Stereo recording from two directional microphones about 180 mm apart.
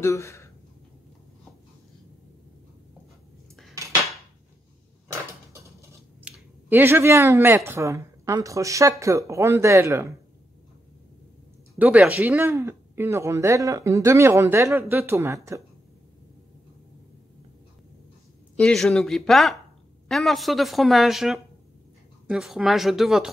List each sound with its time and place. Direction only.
0.0 s speech: 15° left (ahead or behind)
6.3 s speech: 10° right (ahead or behind)
11.8 s speech: 10° right (ahead or behind)
18.6 s a woman's voice: centre (ahead or behind)